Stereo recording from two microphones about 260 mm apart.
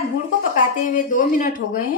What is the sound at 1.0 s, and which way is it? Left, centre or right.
Speech, left.